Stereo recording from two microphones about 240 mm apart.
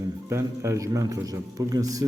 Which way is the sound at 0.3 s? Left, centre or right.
Centre.